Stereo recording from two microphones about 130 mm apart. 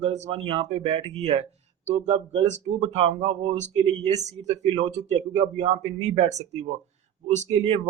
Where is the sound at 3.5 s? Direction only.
60° right (ahead or behind).